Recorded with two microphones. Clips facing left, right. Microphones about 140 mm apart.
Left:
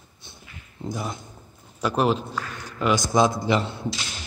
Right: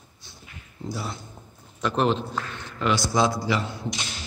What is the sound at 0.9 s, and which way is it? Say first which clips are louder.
A man's voice: left 2 dB; 20° left (ahead or behind).